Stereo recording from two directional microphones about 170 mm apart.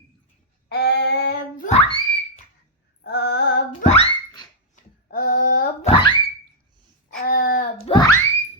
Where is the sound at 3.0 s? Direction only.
70° left (ahead or behind).